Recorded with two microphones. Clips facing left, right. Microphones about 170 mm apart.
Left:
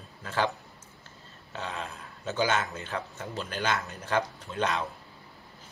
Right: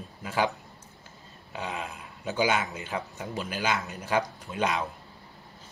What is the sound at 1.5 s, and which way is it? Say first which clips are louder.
Speech: right 2 dB; 10° right (ahead or behind).